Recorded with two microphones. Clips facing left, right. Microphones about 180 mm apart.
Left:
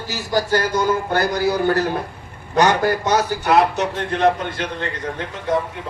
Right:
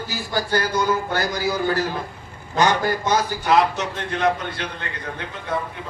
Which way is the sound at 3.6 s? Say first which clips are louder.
Left 3 dB; 55° left (ahead or behind).